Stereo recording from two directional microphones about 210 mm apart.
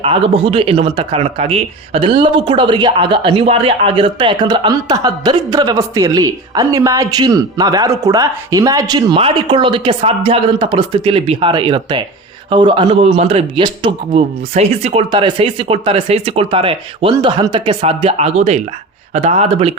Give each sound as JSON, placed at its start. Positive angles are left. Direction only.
{"t": 0.0, "sound": "speech", "side_deg": -25}